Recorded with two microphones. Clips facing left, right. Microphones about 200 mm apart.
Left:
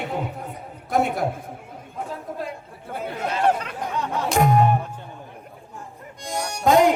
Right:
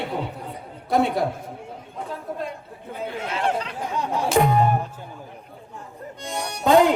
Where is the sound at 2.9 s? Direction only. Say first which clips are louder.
Left 2 dB; 40° left (ahead or behind).